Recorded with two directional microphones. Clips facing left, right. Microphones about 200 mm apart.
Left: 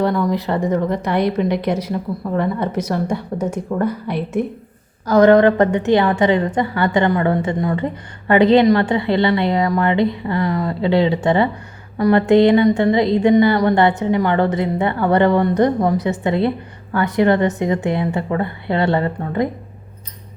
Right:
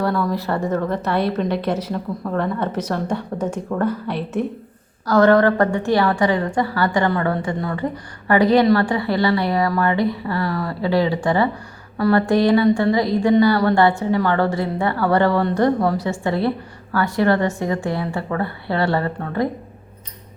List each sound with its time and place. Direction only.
0.0 s a woman's voice: 20° left (ahead or behind)